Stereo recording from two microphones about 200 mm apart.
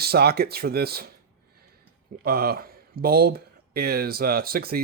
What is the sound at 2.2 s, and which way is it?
Speech, 50° right (ahead or behind).